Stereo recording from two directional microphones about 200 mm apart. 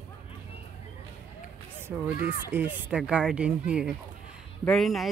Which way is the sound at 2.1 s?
40° left (ahead or behind).